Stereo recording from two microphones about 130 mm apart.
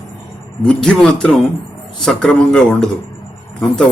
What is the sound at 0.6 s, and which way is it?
Speech, 5° left (ahead or behind).